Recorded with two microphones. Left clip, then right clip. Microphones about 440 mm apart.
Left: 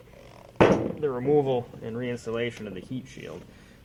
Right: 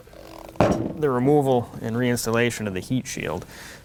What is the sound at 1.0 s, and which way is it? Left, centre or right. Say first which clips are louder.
Speech: right 7 dB; right.